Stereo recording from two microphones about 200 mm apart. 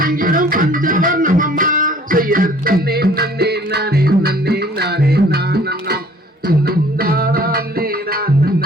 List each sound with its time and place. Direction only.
0.0 s music: 45° right (ahead or behind)